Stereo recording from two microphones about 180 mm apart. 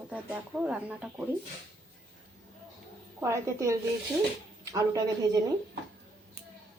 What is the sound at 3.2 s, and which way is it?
A woman's voice, 15° right (ahead or behind).